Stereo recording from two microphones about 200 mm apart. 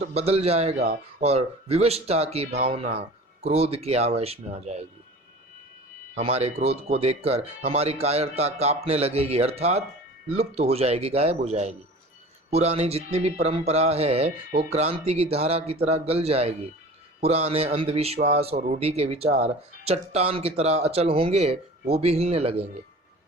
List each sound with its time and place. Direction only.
0.0 s a man's voice: 30° right (ahead or behind)
6.1 s a man's voice: 30° right (ahead or behind)